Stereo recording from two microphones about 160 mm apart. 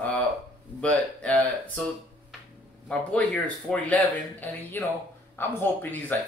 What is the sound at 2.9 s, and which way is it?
Speech, 5° left (ahead or behind).